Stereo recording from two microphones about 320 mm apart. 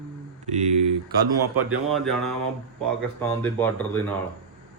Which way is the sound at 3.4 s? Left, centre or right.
Centre.